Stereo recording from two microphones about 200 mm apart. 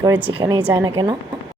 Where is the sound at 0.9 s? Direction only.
25° right (ahead or behind).